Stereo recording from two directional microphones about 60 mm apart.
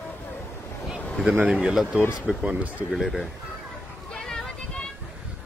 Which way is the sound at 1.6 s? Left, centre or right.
Centre.